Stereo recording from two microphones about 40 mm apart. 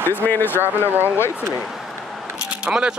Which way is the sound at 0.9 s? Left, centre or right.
Right.